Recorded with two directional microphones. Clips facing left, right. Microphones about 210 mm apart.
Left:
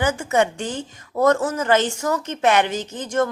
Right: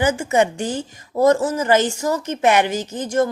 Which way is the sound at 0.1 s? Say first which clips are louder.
Right 2 dB; 10° right (ahead or behind).